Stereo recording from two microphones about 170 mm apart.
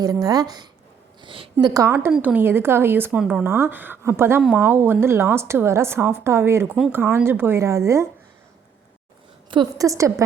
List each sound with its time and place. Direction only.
0.0 s a woman's voice: 20° right (ahead or behind)
1.6 s speech: 20° right (ahead or behind)
9.5 s a woman's voice: 25° right (ahead or behind)